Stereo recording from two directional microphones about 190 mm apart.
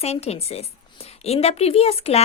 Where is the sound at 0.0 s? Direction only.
35° left (ahead or behind).